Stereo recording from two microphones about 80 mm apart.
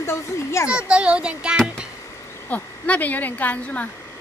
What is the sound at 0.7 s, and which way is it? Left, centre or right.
Speech, centre.